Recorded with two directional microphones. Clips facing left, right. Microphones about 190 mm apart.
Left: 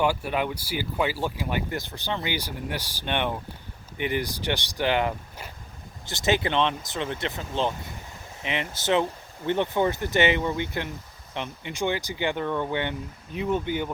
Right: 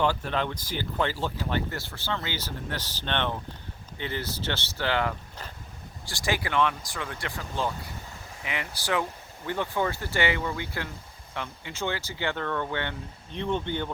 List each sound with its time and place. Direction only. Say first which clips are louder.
0.0 s speech: left 2 dB; 10° left (ahead or behind)